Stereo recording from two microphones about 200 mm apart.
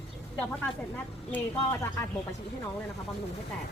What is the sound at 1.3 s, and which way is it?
Speech, 10° left (ahead or behind).